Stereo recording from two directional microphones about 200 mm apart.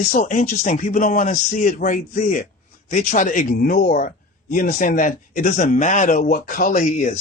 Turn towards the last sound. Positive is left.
turn(degrees=35)  # may be behind; listen again after turning